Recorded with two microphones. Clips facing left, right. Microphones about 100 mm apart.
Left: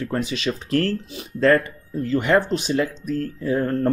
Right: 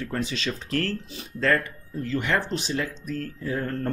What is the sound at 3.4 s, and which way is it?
Speech, 25° left (ahead or behind).